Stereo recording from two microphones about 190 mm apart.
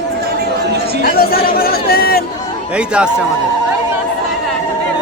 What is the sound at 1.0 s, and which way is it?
Chatter, 50° left (ahead or behind).